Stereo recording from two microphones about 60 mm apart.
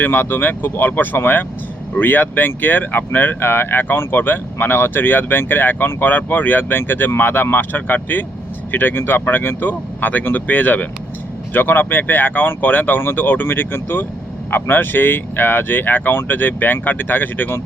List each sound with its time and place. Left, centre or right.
0.0 s speech: left